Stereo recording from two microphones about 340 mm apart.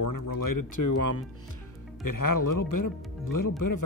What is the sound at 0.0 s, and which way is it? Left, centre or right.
Speech, left.